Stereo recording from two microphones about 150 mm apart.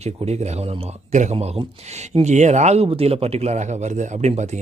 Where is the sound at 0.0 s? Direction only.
45° right (ahead or behind).